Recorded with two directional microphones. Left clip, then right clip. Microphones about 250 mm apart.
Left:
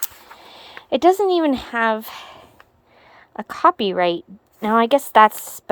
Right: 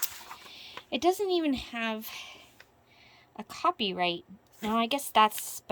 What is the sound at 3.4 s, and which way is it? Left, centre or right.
A woman's voice, centre.